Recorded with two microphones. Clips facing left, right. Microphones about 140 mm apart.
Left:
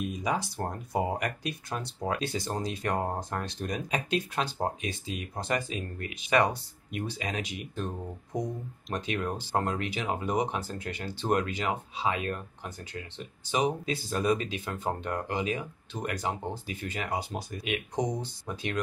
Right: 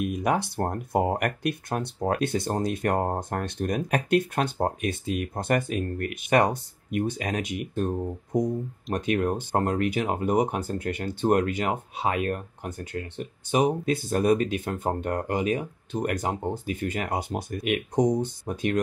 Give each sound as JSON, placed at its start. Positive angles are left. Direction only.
{"t": 0.0, "sound": "speech", "side_deg": -60}